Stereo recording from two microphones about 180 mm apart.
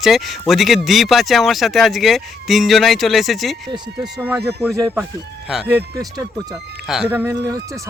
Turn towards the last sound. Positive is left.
turn(degrees=-20)  # may be behind; listen again after turning